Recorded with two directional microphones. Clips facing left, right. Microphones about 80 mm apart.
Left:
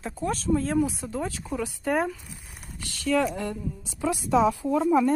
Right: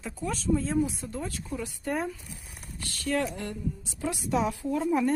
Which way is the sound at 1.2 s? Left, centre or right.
Left.